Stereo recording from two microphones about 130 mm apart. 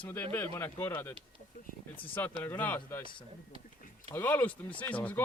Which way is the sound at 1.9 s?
40° left (ahead or behind).